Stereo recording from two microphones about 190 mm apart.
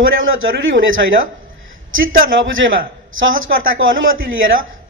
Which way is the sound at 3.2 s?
90° right.